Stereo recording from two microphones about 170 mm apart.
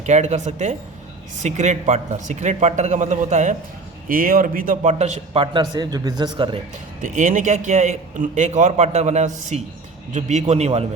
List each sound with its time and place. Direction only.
0.0 s a man's voice: 45° right (ahead or behind); by 6.6 s 25° right (ahead or behind)
7.0 s a man's voice: 50° right (ahead or behind)